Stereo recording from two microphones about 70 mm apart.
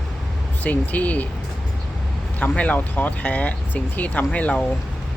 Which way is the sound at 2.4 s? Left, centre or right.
Centre.